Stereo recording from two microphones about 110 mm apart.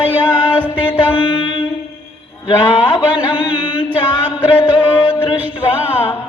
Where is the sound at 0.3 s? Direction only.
45° left (ahead or behind).